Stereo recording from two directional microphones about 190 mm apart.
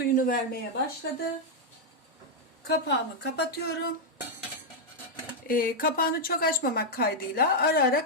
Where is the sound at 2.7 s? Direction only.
60° left (ahead or behind).